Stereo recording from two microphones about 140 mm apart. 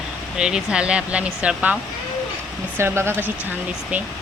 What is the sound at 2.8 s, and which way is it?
Speech, 15° right (ahead or behind).